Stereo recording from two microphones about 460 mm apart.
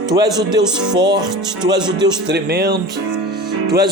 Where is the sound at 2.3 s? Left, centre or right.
Right.